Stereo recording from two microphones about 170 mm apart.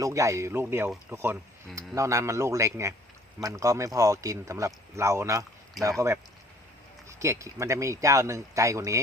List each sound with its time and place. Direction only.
0.0 s speech: 20° right (ahead or behind)
7.1 s speech: 15° right (ahead or behind)